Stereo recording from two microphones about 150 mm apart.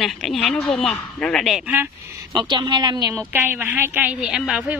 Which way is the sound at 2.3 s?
30° right (ahead or behind).